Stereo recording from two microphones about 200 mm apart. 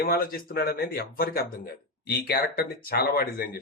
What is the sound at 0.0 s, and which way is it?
Speech, 50° left (ahead or behind).